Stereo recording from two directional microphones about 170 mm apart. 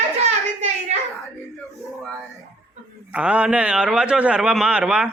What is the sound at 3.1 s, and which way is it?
A man's voice, 5° right (ahead or behind).